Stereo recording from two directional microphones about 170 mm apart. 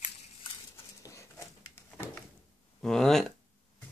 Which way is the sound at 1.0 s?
20° left (ahead or behind).